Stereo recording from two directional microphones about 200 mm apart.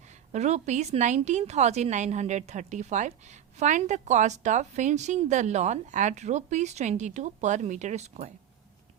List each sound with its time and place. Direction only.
0.3 s a woman's voice: 35° right (ahead or behind)